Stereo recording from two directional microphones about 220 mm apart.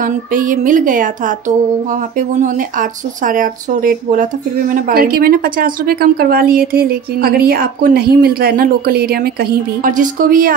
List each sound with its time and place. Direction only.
0.0 s speech: 40° right (ahead or behind)